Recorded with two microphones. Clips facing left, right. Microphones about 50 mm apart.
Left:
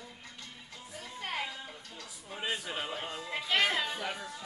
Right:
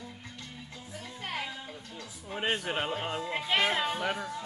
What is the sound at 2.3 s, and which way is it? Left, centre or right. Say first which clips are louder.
Speech: right 5 dB; right.